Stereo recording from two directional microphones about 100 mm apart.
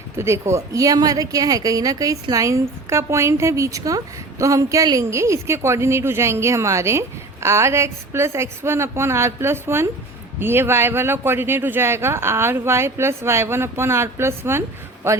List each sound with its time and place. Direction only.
0.2 s a woman's voice: 25° right (ahead or behind)